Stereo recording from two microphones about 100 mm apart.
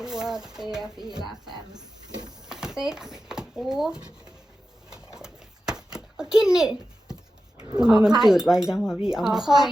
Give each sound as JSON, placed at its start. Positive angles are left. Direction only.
{"t": 0.0, "sound": "speech", "side_deg": -5}
{"t": 0.9, "sound": "speech", "side_deg": -45}
{"t": 1.3, "sound": "speech", "side_deg": -5}
{"t": 4.9, "sound": "a sound", "side_deg": -5}
{"t": 7.8, "sound": "speech", "side_deg": -5}